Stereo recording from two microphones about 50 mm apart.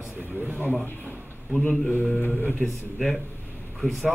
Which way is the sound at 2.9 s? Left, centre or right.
Centre.